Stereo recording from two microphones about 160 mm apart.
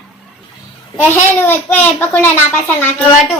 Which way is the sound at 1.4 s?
15° left (ahead or behind).